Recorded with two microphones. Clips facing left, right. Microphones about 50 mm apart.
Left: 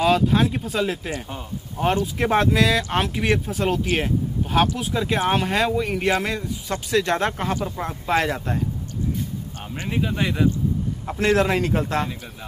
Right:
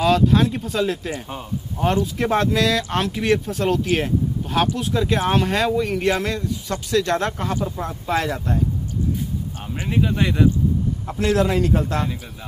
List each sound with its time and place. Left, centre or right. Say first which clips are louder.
0.0 s speech: right 2 dB; centre
2.1 s speech: even; centre
8.1 s speech: left 1 dB; left
9.8 s speech: right 3 dB; centre
11.1 s speech: even; left